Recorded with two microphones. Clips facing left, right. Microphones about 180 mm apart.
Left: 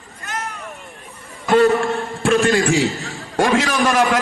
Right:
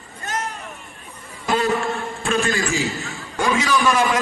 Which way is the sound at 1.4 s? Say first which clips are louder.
Left 8 dB; 60° left (ahead or behind).